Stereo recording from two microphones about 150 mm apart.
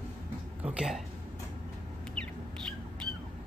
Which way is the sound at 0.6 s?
5° right (ahead or behind).